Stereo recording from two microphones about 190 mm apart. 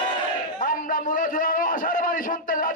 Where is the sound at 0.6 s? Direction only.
45° left (ahead or behind).